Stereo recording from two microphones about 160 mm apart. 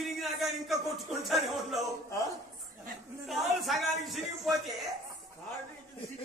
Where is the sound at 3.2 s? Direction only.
Centre (ahead or behind).